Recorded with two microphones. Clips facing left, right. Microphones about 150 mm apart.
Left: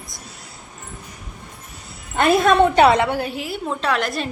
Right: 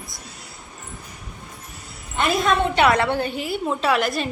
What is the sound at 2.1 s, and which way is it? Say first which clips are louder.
Speech: left 5 dB; 60° left (ahead or behind).